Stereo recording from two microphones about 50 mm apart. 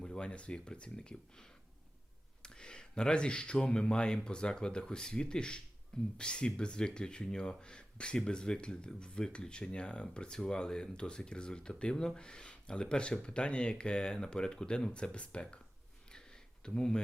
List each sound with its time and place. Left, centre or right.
0.0 s speech: centre
14.9 s speech: left
16.1 s a sound: centre